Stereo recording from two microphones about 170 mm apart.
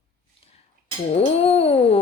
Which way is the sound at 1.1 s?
35° left (ahead or behind).